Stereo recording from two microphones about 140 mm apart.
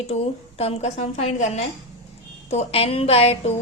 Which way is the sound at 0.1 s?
45° left (ahead or behind).